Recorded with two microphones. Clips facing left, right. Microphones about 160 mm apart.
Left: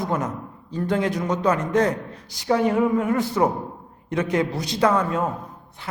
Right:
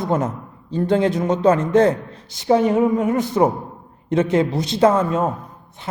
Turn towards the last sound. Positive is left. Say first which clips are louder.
# right 4 dB
turn(degrees=-25)  # may be behind; listen again after turning